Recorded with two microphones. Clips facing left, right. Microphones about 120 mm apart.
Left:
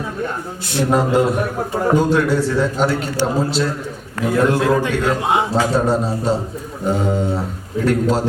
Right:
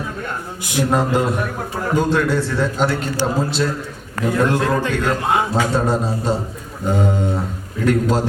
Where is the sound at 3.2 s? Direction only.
Centre (ahead or behind).